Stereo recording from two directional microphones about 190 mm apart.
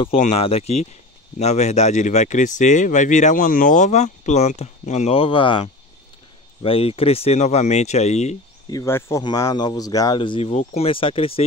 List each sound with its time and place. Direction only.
0.0 s speech: 30° left (ahead or behind)
8.6 s speech: 15° left (ahead or behind)